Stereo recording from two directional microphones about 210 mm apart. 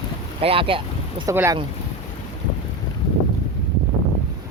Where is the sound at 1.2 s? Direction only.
15° right (ahead or behind).